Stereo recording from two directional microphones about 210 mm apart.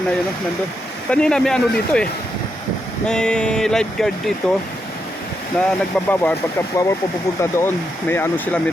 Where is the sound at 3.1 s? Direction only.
5° left (ahead or behind).